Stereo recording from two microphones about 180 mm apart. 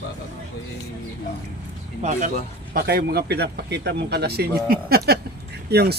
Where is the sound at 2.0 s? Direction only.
40° right (ahead or behind).